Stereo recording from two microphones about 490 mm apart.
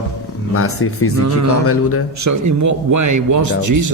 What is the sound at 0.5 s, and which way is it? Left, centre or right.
Speech, left.